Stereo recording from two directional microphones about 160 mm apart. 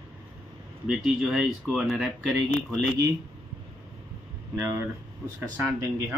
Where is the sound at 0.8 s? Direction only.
5° right (ahead or behind).